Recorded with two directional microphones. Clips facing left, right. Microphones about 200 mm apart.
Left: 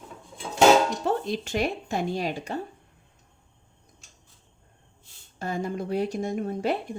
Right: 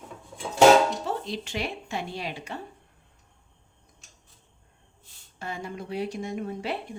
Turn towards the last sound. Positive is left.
turn(degrees=45)  # may be behind; listen again after turning